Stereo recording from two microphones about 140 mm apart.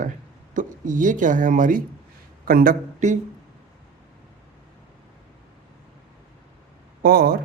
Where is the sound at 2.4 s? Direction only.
90° right; by 3.1 s 70° right (ahead or behind).